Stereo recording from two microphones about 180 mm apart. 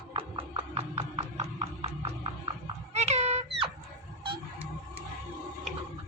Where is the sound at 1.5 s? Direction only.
30° right (ahead or behind).